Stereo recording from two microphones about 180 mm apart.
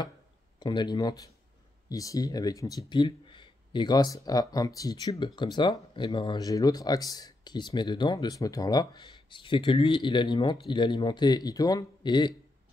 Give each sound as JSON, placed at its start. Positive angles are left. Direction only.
{"t": 0.6, "sound": "speech", "side_deg": 25}